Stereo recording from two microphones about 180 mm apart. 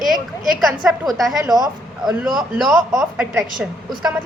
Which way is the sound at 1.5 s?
20° right (ahead or behind).